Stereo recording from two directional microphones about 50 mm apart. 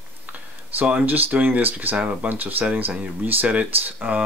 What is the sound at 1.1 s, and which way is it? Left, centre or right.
Speech, right.